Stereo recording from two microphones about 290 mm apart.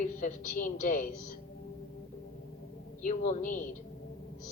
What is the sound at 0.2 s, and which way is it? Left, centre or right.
Speech, left.